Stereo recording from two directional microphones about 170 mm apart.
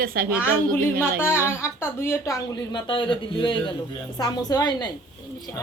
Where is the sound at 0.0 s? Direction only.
60° right (ahead or behind).